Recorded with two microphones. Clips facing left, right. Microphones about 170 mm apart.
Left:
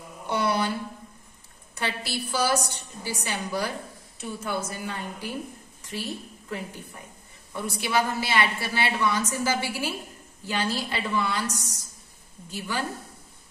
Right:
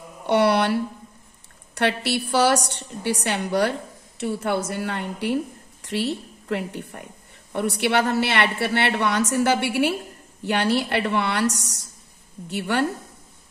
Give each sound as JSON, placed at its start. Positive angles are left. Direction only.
{"t": 0.3, "sound": "speech", "side_deg": -70}
{"t": 1.8, "sound": "a woman's voice", "side_deg": -70}